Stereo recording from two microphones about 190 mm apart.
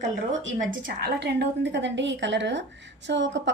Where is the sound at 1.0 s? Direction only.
60° right (ahead or behind).